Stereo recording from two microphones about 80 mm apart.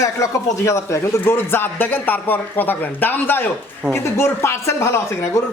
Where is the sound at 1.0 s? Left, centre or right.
Left.